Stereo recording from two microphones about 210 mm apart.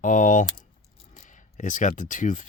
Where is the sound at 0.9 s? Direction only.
40° left (ahead or behind).